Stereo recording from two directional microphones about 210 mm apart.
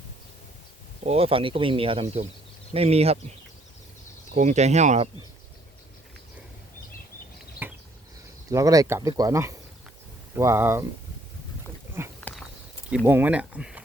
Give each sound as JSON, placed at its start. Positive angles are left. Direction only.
{"t": 1.0, "sound": "speech", "side_deg": -30}
{"t": 4.4, "sound": "speech", "side_deg": -35}
{"t": 7.6, "sound": "a sound", "side_deg": -10}
{"t": 8.4, "sound": "speech", "side_deg": -15}
{"t": 12.2, "sound": "a sound", "side_deg": 0}
{"t": 13.1, "sound": "speech", "side_deg": -10}